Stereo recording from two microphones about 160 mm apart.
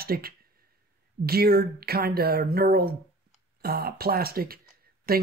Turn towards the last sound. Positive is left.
turn(degrees=-70)  # may be behind; listen again after turning